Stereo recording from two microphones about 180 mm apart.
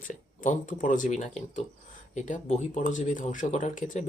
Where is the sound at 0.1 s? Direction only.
45° left (ahead or behind).